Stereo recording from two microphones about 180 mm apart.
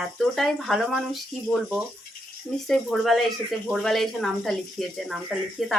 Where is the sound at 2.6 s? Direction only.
Centre (ahead or behind).